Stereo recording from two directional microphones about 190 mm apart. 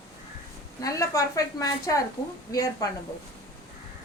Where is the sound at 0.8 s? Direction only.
15° left (ahead or behind).